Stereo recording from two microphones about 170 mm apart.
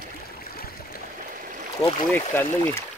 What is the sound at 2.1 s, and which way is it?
Speech, 10° left (ahead or behind).